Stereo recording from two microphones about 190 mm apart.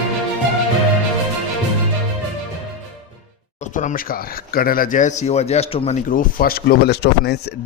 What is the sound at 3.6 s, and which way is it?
Speech, 40° left (ahead or behind).